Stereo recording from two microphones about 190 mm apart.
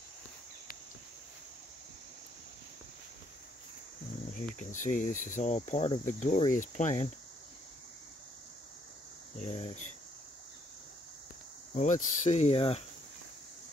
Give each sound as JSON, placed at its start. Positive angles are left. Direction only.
{"t": 4.4, "sound": "speech", "side_deg": 40}
{"t": 9.4, "sound": "speech", "side_deg": 35}
{"t": 11.7, "sound": "speech", "side_deg": 40}